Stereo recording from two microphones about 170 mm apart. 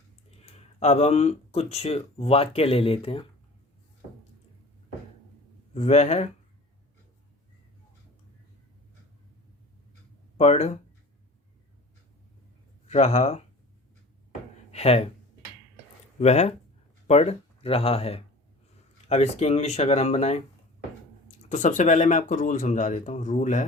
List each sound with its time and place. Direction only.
0.8 s speech: 40° left (ahead or behind)
5.7 s speech: 40° left (ahead or behind)
10.3 s speech: 40° left (ahead or behind)
12.9 s speech: 40° left (ahead or behind)
14.7 s a sound: 35° left (ahead or behind)
16.1 s speech: 40° left (ahead or behind)